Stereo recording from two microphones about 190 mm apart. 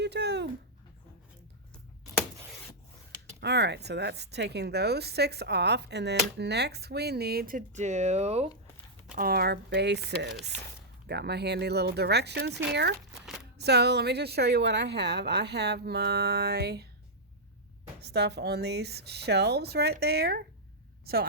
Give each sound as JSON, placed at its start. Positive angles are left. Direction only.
{"t": 0.0, "sound": "dog", "side_deg": -65}
{"t": 3.4, "sound": "a woman's voice", "side_deg": -65}
{"t": 9.1, "sound": "a woman's voice", "side_deg": -55}
{"t": 13.2, "sound": "a sound", "side_deg": 0}
{"t": 13.6, "sound": "a woman's voice", "side_deg": -60}
{"t": 18.0, "sound": "a woman's voice", "side_deg": -60}